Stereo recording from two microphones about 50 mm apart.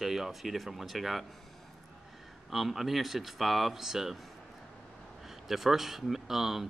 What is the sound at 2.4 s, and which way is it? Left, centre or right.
Speech, centre.